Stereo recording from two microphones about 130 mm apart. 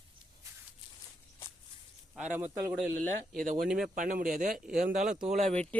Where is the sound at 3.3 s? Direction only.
90° right.